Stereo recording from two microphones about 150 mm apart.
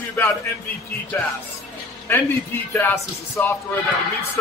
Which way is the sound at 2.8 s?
15° left (ahead or behind).